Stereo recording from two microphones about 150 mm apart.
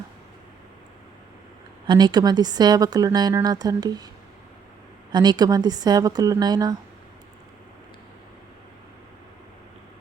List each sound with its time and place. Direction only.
1.9 s a woman's voice: 30° right (ahead or behind)
5.1 s a woman's voice: 30° right (ahead or behind)